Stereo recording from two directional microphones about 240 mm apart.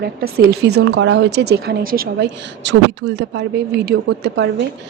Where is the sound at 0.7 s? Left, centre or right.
Right.